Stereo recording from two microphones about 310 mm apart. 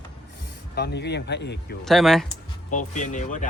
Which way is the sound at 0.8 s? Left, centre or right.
Left.